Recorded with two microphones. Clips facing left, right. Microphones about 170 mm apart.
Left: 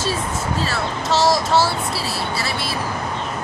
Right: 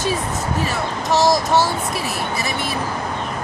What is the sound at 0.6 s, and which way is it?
Speech, 15° right (ahead or behind).